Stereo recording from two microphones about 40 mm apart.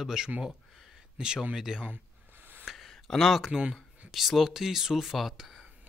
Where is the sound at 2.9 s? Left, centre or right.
Centre.